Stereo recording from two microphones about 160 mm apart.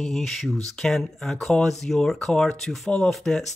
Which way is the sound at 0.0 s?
Centre (ahead or behind).